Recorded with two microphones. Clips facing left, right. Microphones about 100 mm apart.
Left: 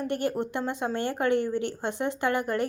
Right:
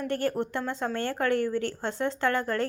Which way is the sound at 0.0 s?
20° left (ahead or behind).